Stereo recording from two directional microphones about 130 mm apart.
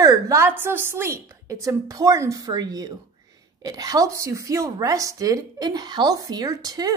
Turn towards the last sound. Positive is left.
turn(degrees=-30)  # may be behind; listen again after turning